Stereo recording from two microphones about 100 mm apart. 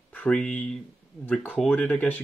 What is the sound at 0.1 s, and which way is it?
Speech, 10° left (ahead or behind).